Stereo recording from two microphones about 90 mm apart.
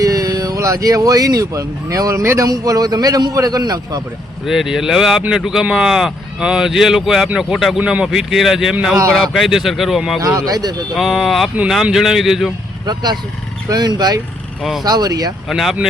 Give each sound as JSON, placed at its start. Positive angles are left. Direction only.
{"t": 0.0, "sound": "a man's voice", "side_deg": -40}
{"t": 4.4, "sound": "speech", "side_deg": -5}
{"t": 7.8, "sound": "speech", "side_deg": -15}
{"t": 8.0, "sound": "speech", "side_deg": -5}
{"t": 10.2, "sound": "a man's voice", "side_deg": -40}
{"t": 10.9, "sound": "speech", "side_deg": -5}
{"t": 12.8, "sound": "a man's voice", "side_deg": -50}
{"t": 15.4, "sound": "speech", "side_deg": 0}